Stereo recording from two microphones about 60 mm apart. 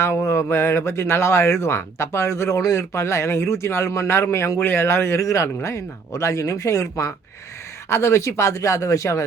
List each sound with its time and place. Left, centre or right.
0.0 s speech: left
4.6 s speech: left
5.2 s speech: left